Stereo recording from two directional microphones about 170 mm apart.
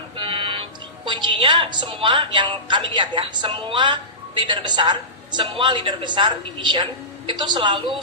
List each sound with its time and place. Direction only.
0.2 s a woman's voice: 30° right (ahead or behind)